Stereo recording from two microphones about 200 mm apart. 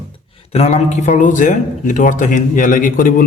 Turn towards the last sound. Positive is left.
turn(degrees=45)  # may be behind; listen again after turning